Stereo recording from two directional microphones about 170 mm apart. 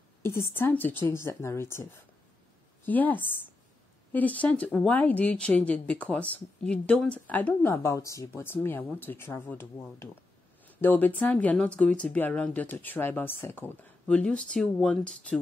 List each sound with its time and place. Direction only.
0.2 s a woman's voice: 15° left (ahead or behind)